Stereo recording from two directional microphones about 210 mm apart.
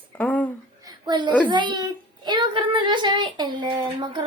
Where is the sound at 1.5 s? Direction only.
20° right (ahead or behind).